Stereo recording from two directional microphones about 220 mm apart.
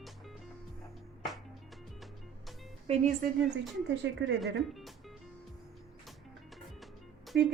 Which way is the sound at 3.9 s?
55° right (ahead or behind).